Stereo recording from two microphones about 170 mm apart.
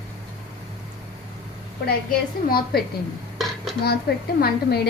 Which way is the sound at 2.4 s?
60° left (ahead or behind).